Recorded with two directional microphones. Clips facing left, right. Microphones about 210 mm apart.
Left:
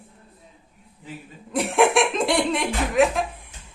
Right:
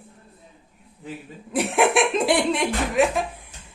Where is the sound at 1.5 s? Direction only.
Centre (ahead or behind).